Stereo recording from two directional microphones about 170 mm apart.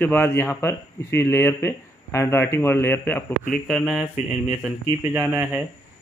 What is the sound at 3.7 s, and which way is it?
Speech, 5° right (ahead or behind).